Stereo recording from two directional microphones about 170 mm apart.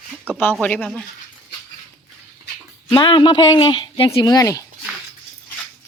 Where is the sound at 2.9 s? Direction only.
30° left (ahead or behind).